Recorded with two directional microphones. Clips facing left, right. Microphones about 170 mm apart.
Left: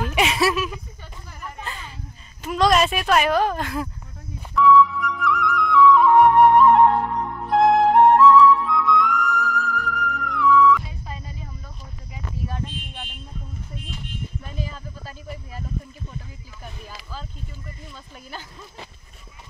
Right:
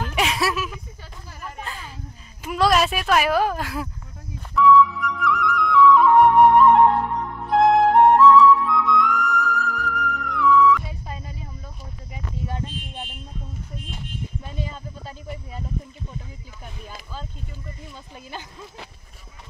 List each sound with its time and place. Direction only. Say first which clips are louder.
0.0 s a sound: left 3 dB; centre (ahead or behind)
2.4 s speech: left 1 dB; 5° right (ahead or behind)
4.6 s flute: even; centre (ahead or behind)
7.4 s music: even; centre (ahead or behind)
14.4 s a sound: right 1 dB; 25° right (ahead or behind)
17.9 s speech: right 2 dB; 20° right (ahead or behind)